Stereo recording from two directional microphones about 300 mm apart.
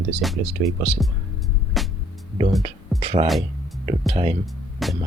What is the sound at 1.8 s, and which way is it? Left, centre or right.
Music, centre.